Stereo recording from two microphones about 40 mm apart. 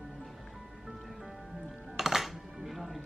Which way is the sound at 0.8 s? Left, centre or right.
Centre.